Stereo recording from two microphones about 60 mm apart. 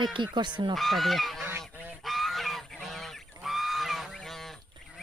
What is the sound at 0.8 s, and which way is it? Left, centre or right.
Goose, centre.